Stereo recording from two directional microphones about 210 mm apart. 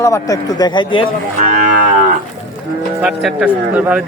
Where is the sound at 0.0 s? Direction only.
15° left (ahead or behind).